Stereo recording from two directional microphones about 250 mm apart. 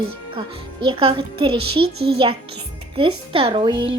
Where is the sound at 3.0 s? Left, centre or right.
Right.